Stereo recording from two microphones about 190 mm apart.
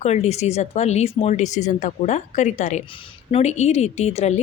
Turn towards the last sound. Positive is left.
turn(degrees=35)  # may be behind; listen again after turning